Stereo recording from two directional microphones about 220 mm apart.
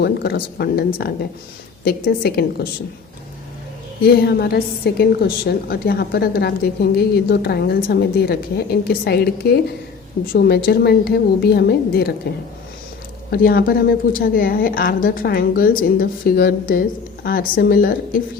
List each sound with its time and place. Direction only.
0.0 s a woman's voice: 45° left (ahead or behind)
4.0 s a woman's voice: 45° left (ahead or behind)
13.3 s a woman's voice: 40° left (ahead or behind)